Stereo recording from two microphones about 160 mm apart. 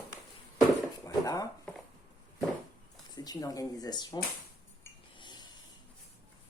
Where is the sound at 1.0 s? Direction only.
20° left (ahead or behind).